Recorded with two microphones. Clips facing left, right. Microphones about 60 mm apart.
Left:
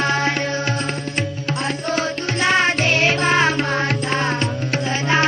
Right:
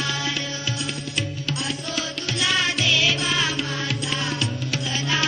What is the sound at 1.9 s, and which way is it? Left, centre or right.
Music, left.